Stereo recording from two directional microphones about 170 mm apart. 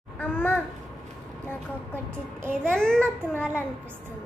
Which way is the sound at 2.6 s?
5° left (ahead or behind).